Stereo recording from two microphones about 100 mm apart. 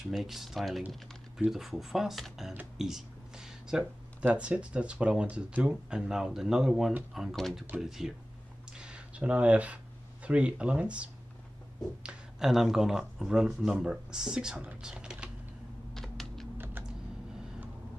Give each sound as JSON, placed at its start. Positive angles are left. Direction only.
{"t": 0.1, "sound": "speech", "side_deg": 0}
{"t": 8.7, "sound": "a sound", "side_deg": -10}
{"t": 10.2, "sound": "speech", "side_deg": -10}
{"t": 15.9, "sound": "typing", "side_deg": 5}
{"t": 16.5, "sound": "typing", "side_deg": -20}